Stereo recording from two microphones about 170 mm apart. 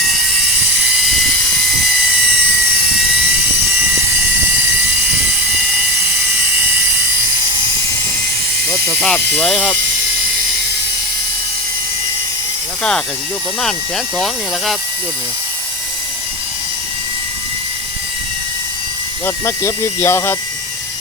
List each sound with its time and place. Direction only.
8.9 s speech: 10° left (ahead or behind)
13.6 s speech: centre (ahead or behind)
19.2 s speech: 15° left (ahead or behind)